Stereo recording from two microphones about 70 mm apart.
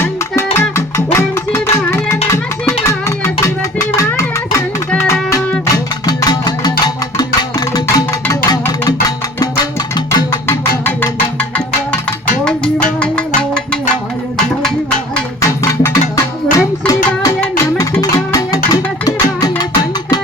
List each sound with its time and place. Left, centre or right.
0.0 s music: left
6.4 s music: left
10.4 s music: left
12.5 s music: centre
14.6 s a sound: centre
15.4 s music: left
16.8 s music: left